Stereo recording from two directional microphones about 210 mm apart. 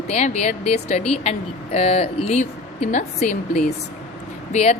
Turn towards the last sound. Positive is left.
turn(degrees=30)  # may be behind; listen again after turning